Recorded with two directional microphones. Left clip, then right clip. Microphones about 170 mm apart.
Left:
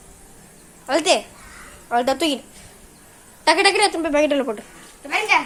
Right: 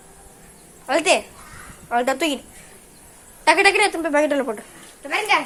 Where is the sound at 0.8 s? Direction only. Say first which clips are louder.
Even; centre (ahead or behind).